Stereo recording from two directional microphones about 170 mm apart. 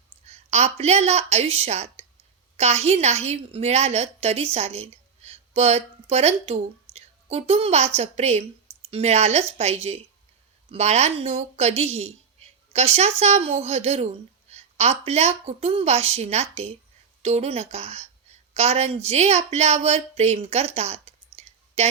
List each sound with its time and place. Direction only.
0.3 s a woman's voice: 40° right (ahead or behind)
21.4 s clicking: 40° right (ahead or behind)
21.8 s speech: 40° right (ahead or behind)